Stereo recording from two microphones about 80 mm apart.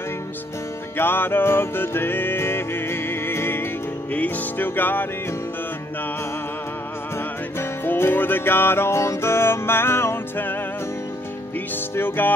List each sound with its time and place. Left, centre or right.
0.9 s music: left
7.5 s music: left
11.7 s music: left